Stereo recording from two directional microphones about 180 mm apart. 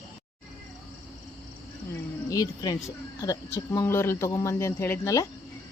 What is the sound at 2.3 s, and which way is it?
Speech, 20° left (ahead or behind).